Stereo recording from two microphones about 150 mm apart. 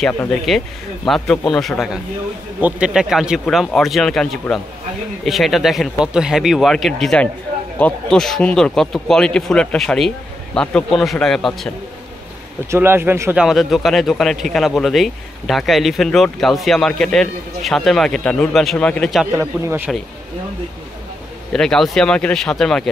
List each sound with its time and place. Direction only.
0.0 s speech: 5° left (ahead or behind)
12.7 s speech: 15° right (ahead or behind)
13.4 s speech: centre (ahead or behind)
19.3 s speech: 15° right (ahead or behind)
21.5 s speech: 5° left (ahead or behind)